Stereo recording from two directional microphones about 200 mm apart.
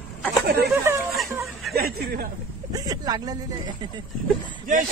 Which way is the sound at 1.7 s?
50° right (ahead or behind).